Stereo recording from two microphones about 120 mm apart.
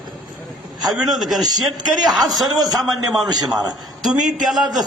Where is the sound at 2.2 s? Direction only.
30° right (ahead or behind).